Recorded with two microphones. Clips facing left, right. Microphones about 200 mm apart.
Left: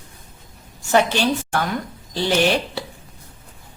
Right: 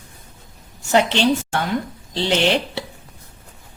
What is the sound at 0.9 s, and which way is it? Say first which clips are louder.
A woman's voice: right 1 dB; 20° right (ahead or behind).